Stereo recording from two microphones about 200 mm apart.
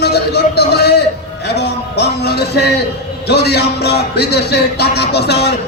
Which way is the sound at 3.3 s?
55° left (ahead or behind).